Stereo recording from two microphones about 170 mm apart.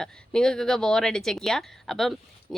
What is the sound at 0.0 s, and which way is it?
Speech, 5° left (ahead or behind).